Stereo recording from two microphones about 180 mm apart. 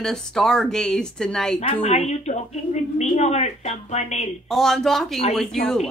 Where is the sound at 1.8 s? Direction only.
40° left (ahead or behind).